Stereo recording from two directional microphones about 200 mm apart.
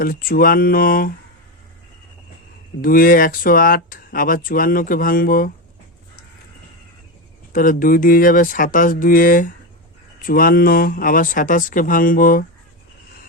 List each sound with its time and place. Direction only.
0.0 s speech: 45° left (ahead or behind)
2.8 s speech: 45° left (ahead or behind)
7.5 s speech: 45° left (ahead or behind)